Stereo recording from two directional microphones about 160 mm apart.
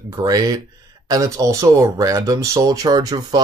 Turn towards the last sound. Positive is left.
turn(degrees=-25)  # may be behind; listen again after turning